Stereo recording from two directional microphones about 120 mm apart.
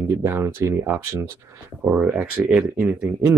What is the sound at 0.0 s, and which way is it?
Speech, 20° right (ahead or behind).